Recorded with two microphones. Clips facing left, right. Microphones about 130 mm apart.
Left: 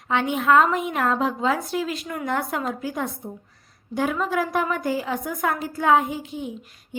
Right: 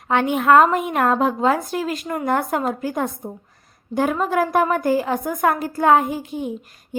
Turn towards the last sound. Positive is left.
turn(degrees=-45)  # may be behind; listen again after turning